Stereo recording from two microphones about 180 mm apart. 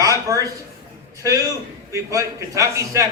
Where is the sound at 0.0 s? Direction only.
20° right (ahead or behind).